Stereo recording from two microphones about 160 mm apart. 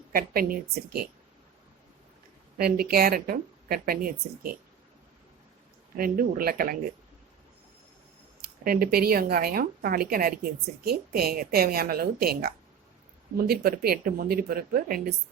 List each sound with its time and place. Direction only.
0.1 s a woman's voice: 65° right (ahead or behind)
2.6 s speech: 70° right (ahead or behind)
6.0 s a woman's voice: 65° right (ahead or behind)
8.6 s speech: 70° right (ahead or behind)